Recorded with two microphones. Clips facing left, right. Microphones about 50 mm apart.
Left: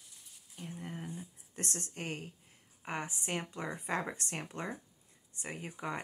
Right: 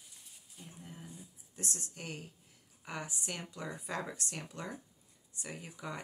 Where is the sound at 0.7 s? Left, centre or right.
Left.